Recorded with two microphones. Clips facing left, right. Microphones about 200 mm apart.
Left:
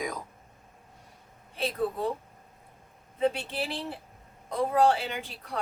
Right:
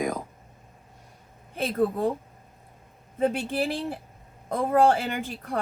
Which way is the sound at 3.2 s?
45° right (ahead or behind).